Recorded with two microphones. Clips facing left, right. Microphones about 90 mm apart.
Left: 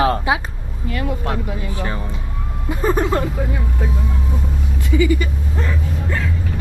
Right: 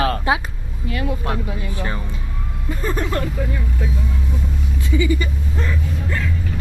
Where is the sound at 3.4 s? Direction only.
10° left (ahead or behind).